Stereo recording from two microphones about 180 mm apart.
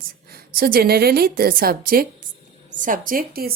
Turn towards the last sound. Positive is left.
turn(degrees=-55)  # may be behind; listen again after turning